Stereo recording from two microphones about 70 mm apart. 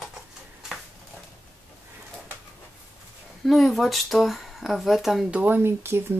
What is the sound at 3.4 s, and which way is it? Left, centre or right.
Speech, centre.